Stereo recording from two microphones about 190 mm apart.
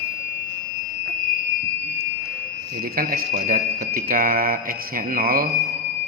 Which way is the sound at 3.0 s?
50° right (ahead or behind).